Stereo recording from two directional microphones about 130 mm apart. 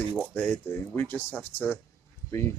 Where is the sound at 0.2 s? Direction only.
15° left (ahead or behind).